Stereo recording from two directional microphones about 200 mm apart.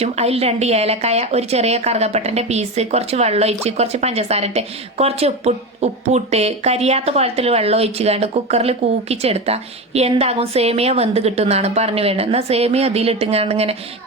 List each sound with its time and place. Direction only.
0.0 s a woman's voice: 30° right (ahead or behind)